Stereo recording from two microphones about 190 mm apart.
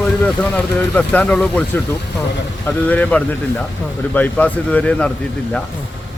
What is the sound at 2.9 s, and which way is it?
Speech, 10° left (ahead or behind).